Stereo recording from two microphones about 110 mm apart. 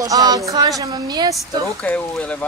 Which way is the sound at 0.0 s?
35° right (ahead or behind).